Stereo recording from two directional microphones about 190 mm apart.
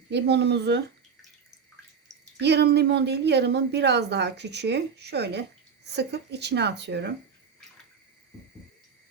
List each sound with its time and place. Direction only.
0.1 s a woman's voice: 65° right (ahead or behind)
2.4 s a woman's voice: 65° right (ahead or behind)